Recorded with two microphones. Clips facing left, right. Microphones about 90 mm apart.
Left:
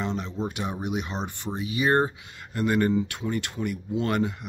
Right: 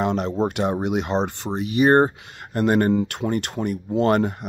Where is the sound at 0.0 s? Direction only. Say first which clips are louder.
Right 8 dB; 65° right (ahead or behind).